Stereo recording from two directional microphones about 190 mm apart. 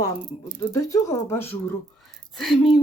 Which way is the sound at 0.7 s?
20° left (ahead or behind).